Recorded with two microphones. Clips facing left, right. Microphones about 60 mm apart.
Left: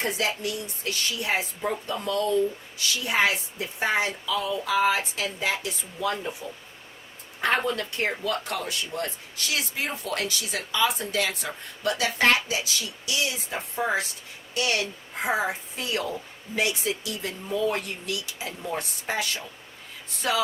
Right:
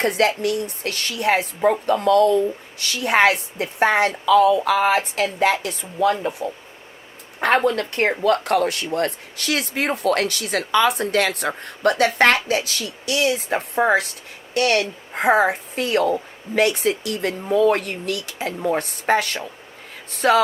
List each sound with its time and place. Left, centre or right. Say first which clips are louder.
0.0 s speech: right 8 dB; right